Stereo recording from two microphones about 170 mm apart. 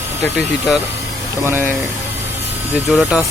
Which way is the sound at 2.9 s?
Centre (ahead or behind).